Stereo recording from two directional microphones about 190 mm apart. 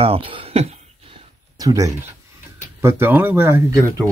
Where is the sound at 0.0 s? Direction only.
30° right (ahead or behind).